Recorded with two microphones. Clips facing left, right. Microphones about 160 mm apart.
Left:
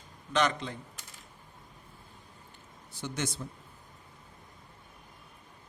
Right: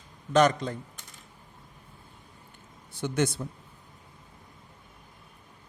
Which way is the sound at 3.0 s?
55° right (ahead or behind).